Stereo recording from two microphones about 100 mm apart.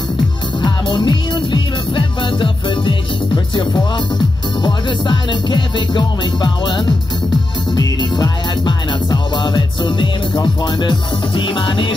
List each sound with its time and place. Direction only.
0.6 s music: 50° left (ahead or behind)
4.6 s music: 45° left (ahead or behind)
7.7 s music: 40° left (ahead or behind); by 11.9 s 55° left (ahead or behind)